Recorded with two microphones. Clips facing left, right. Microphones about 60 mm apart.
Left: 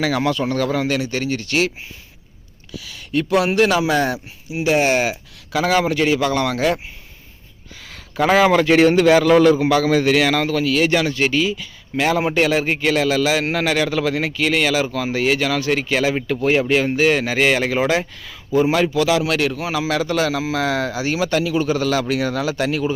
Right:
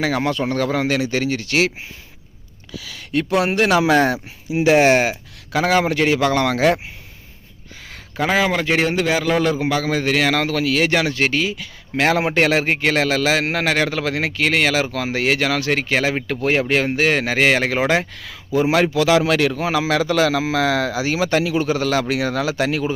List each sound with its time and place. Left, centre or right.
0.0 s speech: right
3.1 s speech: right
3.4 s speech: right
3.8 s a man's voice: right
5.0 s speech: right
5.9 s a man's voice: right
8.2 s speech: right
8.6 s a man's voice: centre; by 10.3 s right
10.3 s speech: right
10.8 s a man's voice: right
16.2 s speech: right
18.2 s speech: right
18.7 s speech: right